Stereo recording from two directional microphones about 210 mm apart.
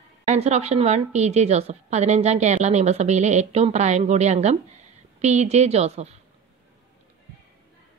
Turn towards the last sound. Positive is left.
turn(degrees=-30)  # may be behind; listen again after turning